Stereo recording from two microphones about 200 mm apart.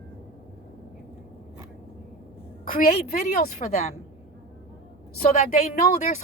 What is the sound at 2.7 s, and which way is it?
Speech, 45° left (ahead or behind).